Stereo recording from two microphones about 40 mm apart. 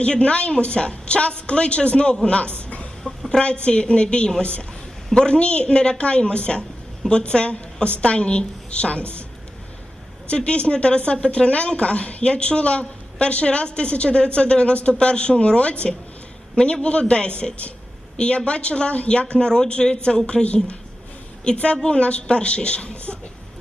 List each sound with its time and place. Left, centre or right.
0.0 s a woman's voice: left
2.6 s a sound: left
3.1 s chicken: left
3.4 s a woman's voice: left
10.2 s a woman's voice: left